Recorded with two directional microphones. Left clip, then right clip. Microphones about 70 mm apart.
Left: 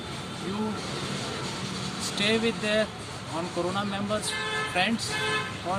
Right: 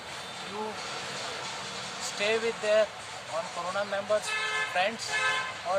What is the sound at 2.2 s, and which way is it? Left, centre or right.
Speech, right.